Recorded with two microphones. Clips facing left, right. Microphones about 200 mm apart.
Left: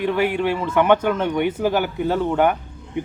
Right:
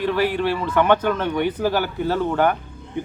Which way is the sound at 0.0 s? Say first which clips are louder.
Left 1 dB; 15° left (ahead or behind).